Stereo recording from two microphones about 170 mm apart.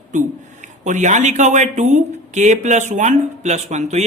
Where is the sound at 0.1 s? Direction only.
50° right (ahead or behind).